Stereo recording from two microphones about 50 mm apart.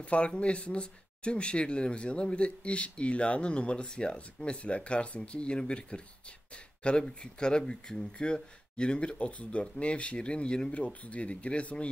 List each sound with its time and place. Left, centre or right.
0.0 s speech: left